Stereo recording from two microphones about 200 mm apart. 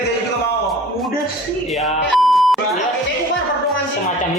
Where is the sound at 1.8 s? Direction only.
Centre (ahead or behind).